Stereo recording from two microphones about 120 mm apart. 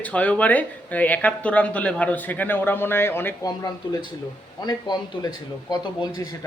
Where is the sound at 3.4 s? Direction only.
30° left (ahead or behind).